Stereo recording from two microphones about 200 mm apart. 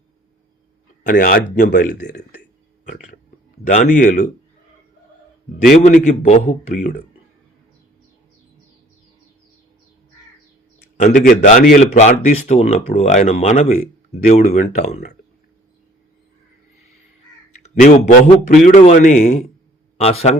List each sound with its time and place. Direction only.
1.1 s speech: 45° left (ahead or behind)
3.7 s a man's voice: 40° left (ahead or behind)
5.8 s a man's voice: 40° left (ahead or behind)
10.8 s a man's voice: 40° left (ahead or behind)
17.7 s a man's voice: 45° left (ahead or behind)